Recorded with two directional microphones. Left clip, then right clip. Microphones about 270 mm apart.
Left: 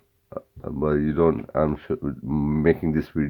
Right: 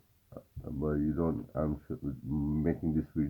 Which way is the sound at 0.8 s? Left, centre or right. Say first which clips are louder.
Left 11 dB; left.